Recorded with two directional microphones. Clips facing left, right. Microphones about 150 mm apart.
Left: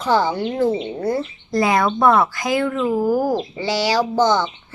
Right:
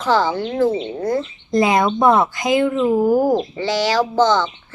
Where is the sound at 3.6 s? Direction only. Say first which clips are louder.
Right 1 dB; 10° left (ahead or behind).